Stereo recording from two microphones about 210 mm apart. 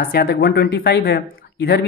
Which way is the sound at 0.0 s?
45° left (ahead or behind).